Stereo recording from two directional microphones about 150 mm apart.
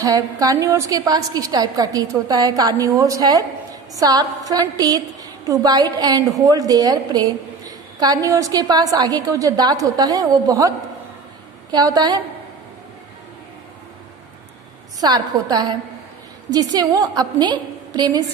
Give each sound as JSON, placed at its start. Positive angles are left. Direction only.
{"t": 0.0, "sound": "a woman's voice", "side_deg": -25}
{"t": 11.7, "sound": "a woman's voice", "side_deg": -25}
{"t": 15.0, "sound": "a woman's voice", "side_deg": -25}